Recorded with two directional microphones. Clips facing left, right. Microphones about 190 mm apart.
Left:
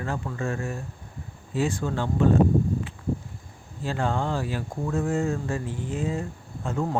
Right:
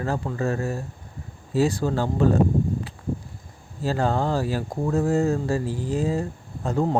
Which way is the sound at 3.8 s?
40° right (ahead or behind).